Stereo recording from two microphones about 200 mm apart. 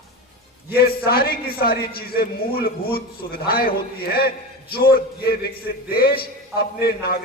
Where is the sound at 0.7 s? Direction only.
50° left (ahead or behind).